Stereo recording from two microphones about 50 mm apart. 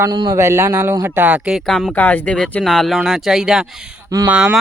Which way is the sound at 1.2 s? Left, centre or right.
Right.